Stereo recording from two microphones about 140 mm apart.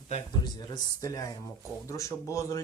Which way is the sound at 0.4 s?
30° left (ahead or behind).